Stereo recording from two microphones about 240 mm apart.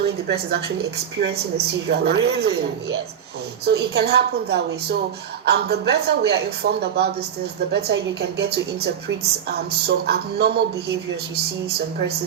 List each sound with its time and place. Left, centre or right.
0.0 s a woman's voice: right
3.7 s a woman's voice: right